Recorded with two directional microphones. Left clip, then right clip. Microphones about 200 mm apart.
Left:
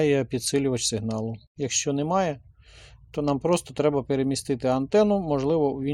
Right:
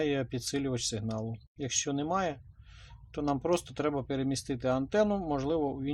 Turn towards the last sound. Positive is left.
turn(degrees=30)  # may be behind; listen again after turning